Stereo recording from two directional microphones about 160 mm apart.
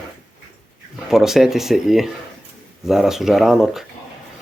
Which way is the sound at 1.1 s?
Centre (ahead or behind).